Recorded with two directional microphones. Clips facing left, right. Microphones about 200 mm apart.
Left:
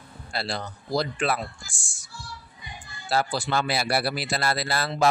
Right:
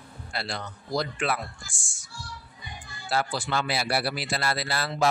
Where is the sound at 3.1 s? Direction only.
35° left (ahead or behind).